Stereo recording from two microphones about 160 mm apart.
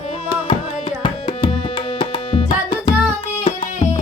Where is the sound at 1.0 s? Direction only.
35° left (ahead or behind).